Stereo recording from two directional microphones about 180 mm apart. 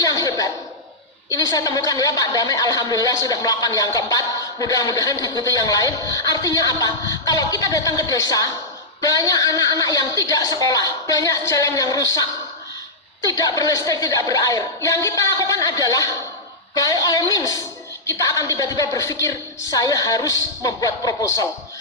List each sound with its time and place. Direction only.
0.0 s a sound: 20° left (ahead or behind)
1.3 s a man's voice: 20° left (ahead or behind)
13.2 s a man's voice: 20° left (ahead or behind)